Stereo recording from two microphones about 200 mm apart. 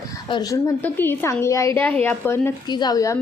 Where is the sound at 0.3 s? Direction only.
20° left (ahead or behind).